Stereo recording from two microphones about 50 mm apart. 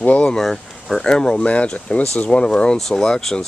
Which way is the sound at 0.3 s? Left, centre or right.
Centre.